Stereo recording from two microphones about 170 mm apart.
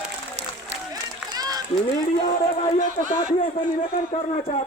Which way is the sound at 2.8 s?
55° left (ahead or behind).